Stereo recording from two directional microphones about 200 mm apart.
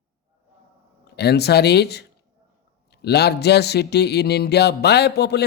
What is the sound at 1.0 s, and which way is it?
Speech, 55° left (ahead or behind).